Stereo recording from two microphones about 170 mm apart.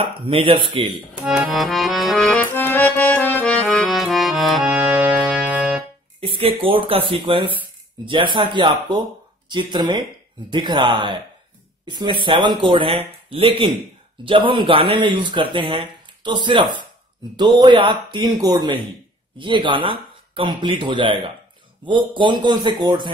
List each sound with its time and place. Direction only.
0.0 s speech: 30° right (ahead or behind)
1.1 s accordion: 5° right (ahead or behind)
6.2 s a man's voice: 30° right (ahead or behind)